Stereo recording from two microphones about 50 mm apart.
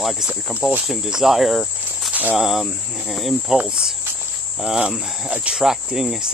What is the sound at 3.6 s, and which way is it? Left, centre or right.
Speech, centre.